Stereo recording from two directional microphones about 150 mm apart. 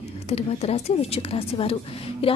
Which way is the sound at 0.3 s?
45° left (ahead or behind).